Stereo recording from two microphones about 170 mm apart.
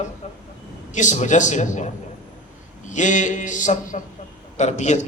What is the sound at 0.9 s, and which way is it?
Speech, 45° left (ahead or behind).